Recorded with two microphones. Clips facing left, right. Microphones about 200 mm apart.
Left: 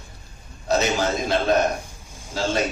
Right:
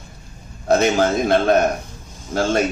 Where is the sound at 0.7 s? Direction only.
55° right (ahead or behind).